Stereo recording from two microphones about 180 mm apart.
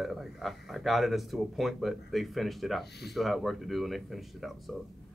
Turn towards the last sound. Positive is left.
turn(degrees=0)  # may be behind; listen again after turning